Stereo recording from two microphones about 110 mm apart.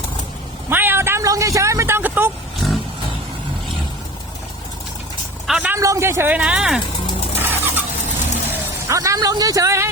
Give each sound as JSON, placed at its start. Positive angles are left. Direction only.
{"t": 0.7, "sound": "vehicle", "side_deg": -20}
{"t": 2.6, "sound": "vehicle", "side_deg": -5}
{"t": 5.5, "sound": "a sound", "side_deg": -10}
{"t": 5.7, "sound": "speech", "side_deg": -25}
{"t": 7.3, "sound": "vehicle", "side_deg": -20}
{"t": 8.9, "sound": "speech", "side_deg": -30}